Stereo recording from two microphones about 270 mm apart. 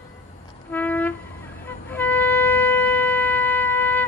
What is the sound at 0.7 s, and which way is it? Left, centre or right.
Music, centre.